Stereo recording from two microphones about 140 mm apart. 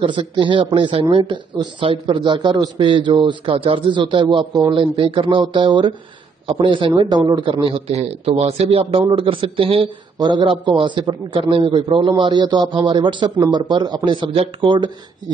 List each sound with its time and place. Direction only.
0.0 s a man's voice: 35° right (ahead or behind)